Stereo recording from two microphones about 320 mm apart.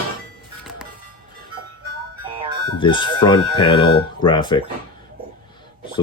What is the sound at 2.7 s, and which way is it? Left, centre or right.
Speech, centre.